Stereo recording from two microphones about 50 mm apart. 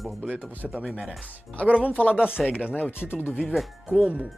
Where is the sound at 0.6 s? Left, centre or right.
Right.